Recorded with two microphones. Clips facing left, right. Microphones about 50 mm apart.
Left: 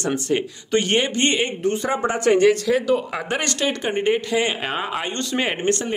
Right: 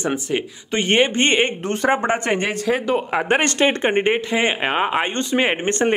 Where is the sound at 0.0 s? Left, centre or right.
Centre.